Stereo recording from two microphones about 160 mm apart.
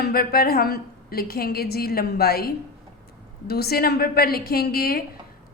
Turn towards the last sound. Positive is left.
turn(degrees=75)  # may be behind; listen again after turning